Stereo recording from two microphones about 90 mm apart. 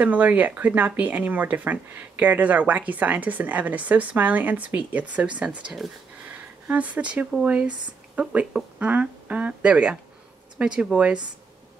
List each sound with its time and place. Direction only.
0.0 s speech: 15° right (ahead or behind)